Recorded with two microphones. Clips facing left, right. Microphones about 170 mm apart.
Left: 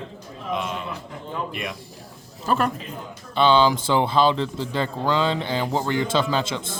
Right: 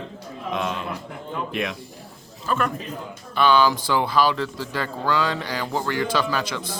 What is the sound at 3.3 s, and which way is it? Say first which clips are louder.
Speech: left 1 dB; 20° left (ahead or behind).